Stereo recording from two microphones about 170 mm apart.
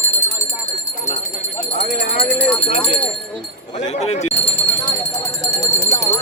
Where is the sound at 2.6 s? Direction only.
45° left (ahead or behind).